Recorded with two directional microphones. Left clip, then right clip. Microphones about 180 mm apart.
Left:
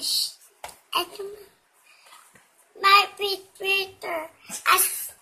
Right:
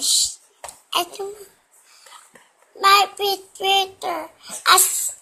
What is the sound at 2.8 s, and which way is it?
Child singing, 40° right (ahead or behind).